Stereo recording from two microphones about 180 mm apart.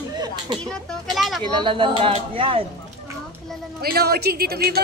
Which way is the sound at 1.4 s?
25° right (ahead or behind).